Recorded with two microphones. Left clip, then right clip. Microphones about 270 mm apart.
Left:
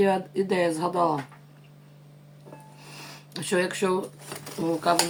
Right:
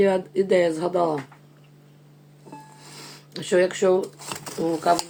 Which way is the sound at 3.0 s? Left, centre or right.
Centre.